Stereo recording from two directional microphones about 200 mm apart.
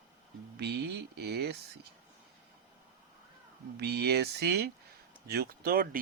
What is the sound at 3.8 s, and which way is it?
Speech, 55° right (ahead or behind).